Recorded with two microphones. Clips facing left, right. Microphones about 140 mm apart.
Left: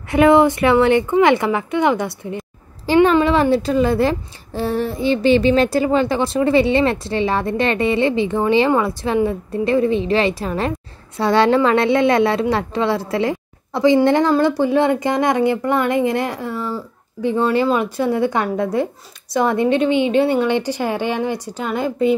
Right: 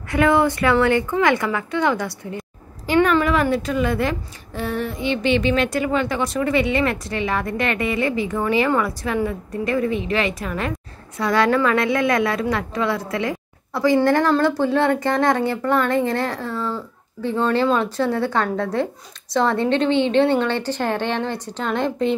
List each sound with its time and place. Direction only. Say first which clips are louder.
0.1 s a child's voice: left 5 dB; 20° left (ahead or behind); by 22.1 s 5° left (ahead or behind)